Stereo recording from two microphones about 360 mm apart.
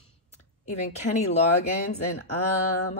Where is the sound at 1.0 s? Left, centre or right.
Centre.